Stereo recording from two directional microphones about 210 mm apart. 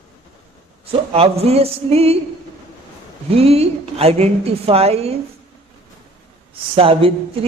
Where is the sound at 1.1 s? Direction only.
30° right (ahead or behind).